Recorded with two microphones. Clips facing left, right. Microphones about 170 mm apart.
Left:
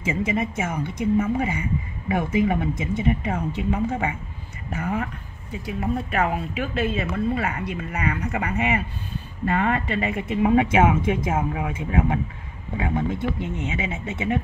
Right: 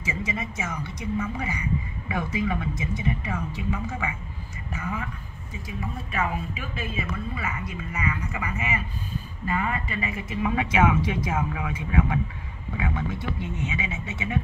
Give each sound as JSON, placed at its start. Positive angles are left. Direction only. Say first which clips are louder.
{"t": 0.0, "sound": "speech", "louder": "left 7 dB", "side_deg": 55}
{"t": 1.1, "sound": "speech", "louder": "left 7 dB", "side_deg": 30}
{"t": 2.0, "sound": "speech", "louder": "left 6 dB", "side_deg": 50}
{"t": 3.7, "sound": "speech", "louder": "left 8 dB", "side_deg": 35}
{"t": 4.6, "sound": "speech", "louder": "left 6 dB", "side_deg": 60}
{"t": 10.4, "sound": "speech", "louder": "left 5 dB", "side_deg": 40}
{"t": 11.3, "sound": "speech", "louder": "left 3 dB", "side_deg": 40}
{"t": 13.7, "sound": "speech", "louder": "left 4 dB", "side_deg": 55}